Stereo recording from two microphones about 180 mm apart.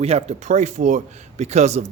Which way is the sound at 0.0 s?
35° right (ahead or behind).